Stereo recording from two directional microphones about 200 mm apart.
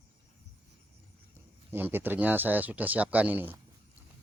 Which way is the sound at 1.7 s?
10° right (ahead or behind).